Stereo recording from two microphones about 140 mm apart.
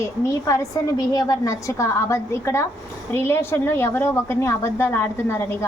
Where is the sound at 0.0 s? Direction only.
20° left (ahead or behind).